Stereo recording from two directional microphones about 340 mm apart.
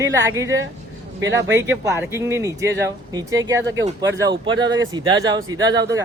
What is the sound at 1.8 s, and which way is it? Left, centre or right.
Speech, centre.